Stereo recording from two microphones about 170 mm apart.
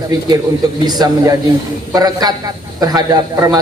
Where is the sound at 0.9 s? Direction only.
25° right (ahead or behind).